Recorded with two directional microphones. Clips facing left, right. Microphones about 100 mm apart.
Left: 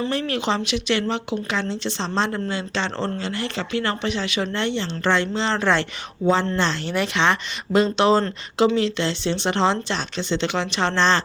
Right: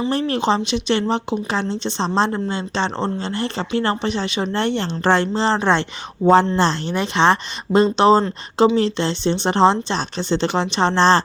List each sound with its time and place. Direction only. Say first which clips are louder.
0.1 s speech: right 4 dB; 35° right (ahead or behind)
4.5 s speech: right 4 dB; 45° right (ahead or behind)
5.5 s speech: even; 25° right (ahead or behind)
6.8 s speech: right 4 dB; 25° right (ahead or behind)